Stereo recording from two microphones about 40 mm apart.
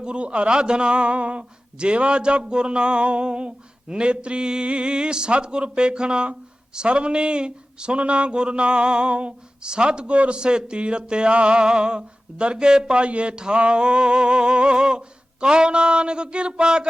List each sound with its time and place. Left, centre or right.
0.0 s a man's voice: right